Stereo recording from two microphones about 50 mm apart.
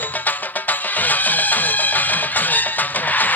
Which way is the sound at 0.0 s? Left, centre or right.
Left.